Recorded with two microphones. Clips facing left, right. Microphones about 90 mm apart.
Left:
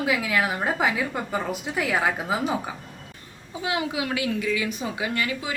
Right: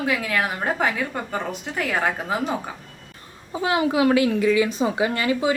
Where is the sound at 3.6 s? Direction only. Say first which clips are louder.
Right 8 dB; 45° right (ahead or behind); by 5.6 s 30° right (ahead or behind).